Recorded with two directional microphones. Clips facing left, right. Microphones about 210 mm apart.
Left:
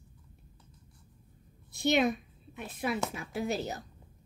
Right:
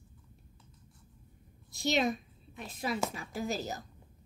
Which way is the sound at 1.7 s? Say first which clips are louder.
Left 4 dB; 60° left (ahead or behind).